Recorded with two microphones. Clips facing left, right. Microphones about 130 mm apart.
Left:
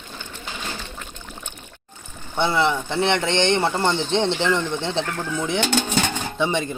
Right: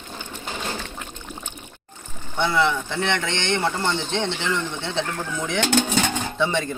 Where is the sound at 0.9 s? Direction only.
10° right (ahead or behind).